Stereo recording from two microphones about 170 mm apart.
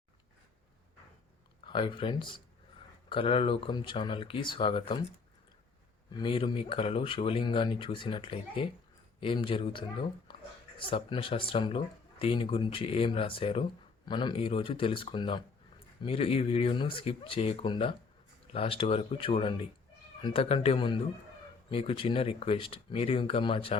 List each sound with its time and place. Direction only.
1.6 s speech: 30° left (ahead or behind)
6.1 s speech: 30° left (ahead or behind)
10.3 s a sound: 30° left (ahead or behind)
10.8 s speech: 30° left (ahead or behind)